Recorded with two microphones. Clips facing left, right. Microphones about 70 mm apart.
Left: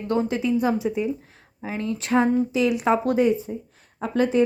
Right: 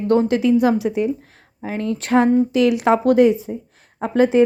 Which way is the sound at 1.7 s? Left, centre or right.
Right.